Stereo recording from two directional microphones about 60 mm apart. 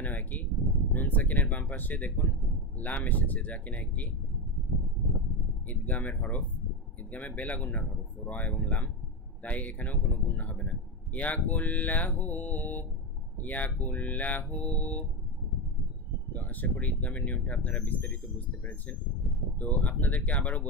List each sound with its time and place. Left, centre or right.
0.0 s a sound: left
2.8 s a man's voice: left
5.7 s a man's voice: left
16.3 s a man's voice: left
19.6 s a man's voice: left